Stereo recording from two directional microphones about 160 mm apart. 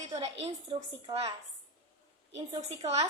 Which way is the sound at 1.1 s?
25° right (ahead or behind).